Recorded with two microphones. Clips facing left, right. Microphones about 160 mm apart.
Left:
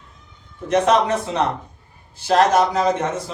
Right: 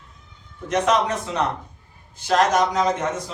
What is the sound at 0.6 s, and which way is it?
A man's voice, 30° left (ahead or behind).